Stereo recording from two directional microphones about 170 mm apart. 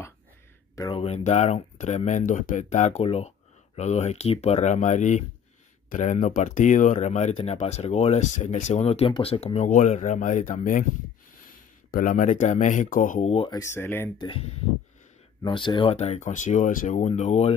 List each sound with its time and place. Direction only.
0.7 s speech: 30° left (ahead or behind)
13.5 s speech: 15° left (ahead or behind)
14.2 s speech: 35° left (ahead or behind)